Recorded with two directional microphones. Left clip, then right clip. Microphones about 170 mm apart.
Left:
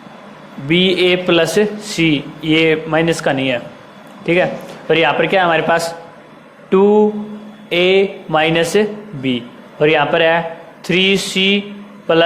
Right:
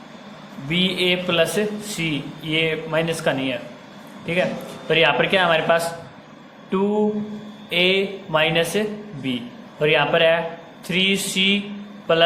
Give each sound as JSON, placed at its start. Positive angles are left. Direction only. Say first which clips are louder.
{"t": 0.7, "sound": "a man's voice", "louder": "left 7 dB", "side_deg": 25}
{"t": 4.9, "sound": "a man's voice", "louder": "left 4 dB", "side_deg": 20}